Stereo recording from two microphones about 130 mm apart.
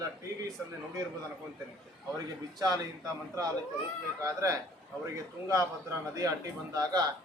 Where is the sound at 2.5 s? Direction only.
30° right (ahead or behind).